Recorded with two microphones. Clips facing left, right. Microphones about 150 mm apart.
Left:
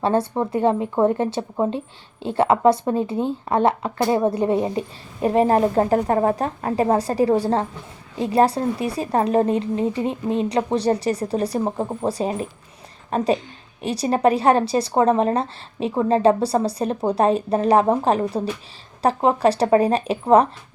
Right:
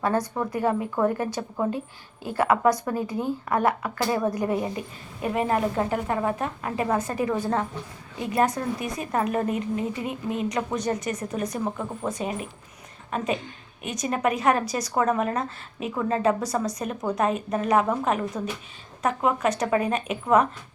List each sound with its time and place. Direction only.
0.0 s a woman's voice: 25° left (ahead or behind)